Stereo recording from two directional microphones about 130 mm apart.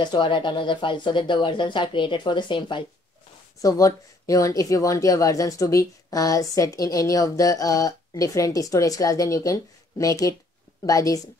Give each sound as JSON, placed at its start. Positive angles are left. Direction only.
{"t": 0.0, "sound": "speech", "side_deg": 40}
{"t": 3.6, "sound": "speech", "side_deg": 25}